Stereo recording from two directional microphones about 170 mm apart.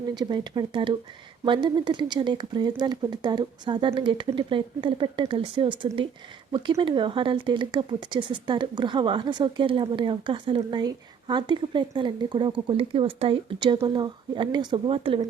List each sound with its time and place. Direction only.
0.2 s speech: 25° right (ahead or behind)